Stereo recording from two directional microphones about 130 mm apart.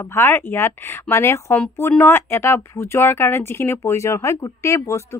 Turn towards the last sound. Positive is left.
turn(degrees=20)  # may be behind; listen again after turning